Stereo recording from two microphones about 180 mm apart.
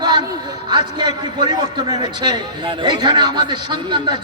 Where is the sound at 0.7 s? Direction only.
25° right (ahead or behind).